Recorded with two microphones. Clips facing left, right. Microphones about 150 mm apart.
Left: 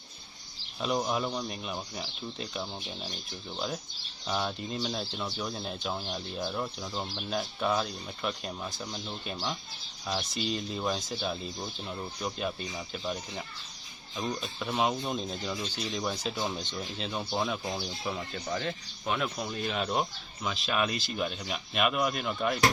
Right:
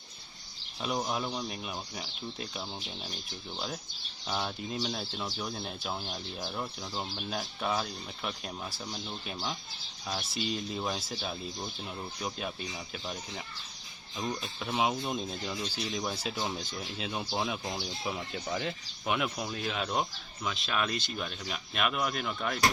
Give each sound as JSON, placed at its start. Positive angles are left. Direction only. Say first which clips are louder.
{"t": 0.8, "sound": "speech", "louder": "left 3 dB", "side_deg": 0}
{"t": 4.3, "sound": "speech", "louder": "left 2 dB", "side_deg": 0}